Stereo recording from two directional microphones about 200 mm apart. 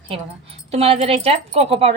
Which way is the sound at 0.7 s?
30° right (ahead or behind).